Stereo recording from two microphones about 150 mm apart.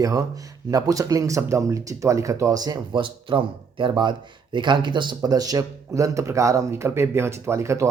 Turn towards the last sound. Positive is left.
turn(degrees=-20)  # may be behind; listen again after turning